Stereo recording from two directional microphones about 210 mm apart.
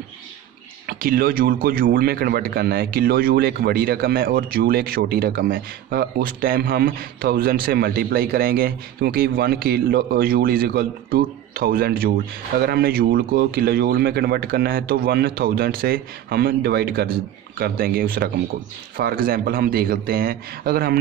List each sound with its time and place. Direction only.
0.8 s a man's voice: 45° right (ahead or behind)